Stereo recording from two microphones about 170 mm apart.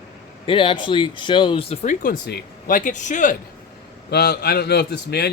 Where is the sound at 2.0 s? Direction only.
65° left (ahead or behind); by 3.4 s 50° left (ahead or behind).